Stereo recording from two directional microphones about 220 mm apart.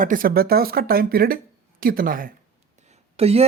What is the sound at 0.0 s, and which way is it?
Speech, 40° right (ahead or behind).